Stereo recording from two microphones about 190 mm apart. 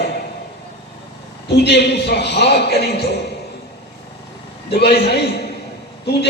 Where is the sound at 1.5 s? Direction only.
60° left (ahead or behind).